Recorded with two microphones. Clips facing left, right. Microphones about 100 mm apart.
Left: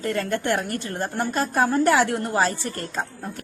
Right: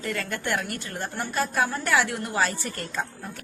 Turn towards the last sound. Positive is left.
turn(degrees=30)  # may be behind; listen again after turning